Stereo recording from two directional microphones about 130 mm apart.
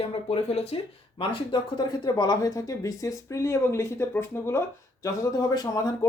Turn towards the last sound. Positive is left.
turn(degrees=25)  # may be behind; listen again after turning